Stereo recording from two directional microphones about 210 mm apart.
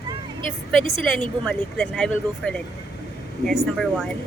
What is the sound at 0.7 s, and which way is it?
Speech, centre (ahead or behind).